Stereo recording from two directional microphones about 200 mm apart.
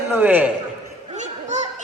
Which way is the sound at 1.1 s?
35° right (ahead or behind).